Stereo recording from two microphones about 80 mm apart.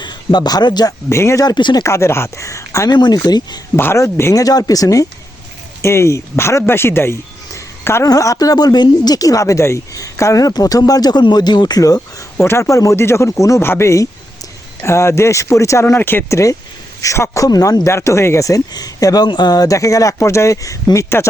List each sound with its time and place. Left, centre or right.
0.0 s speech: left
1.1 s speech: left
1.5 s speech: left
1.8 s speech: left
2.9 s speech: left
3.8 s speech: left
4.0 s speech: left
5.8 s speech: left
8.0 s speech: left
12.5 s speech: left
17.0 s a man's voice: left
19.3 s speech: left